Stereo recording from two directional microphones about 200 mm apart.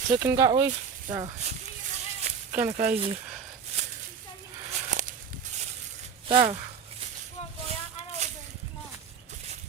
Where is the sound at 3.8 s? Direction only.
35° right (ahead or behind).